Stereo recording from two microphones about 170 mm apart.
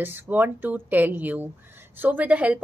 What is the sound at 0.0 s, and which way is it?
Speech, 10° right (ahead or behind).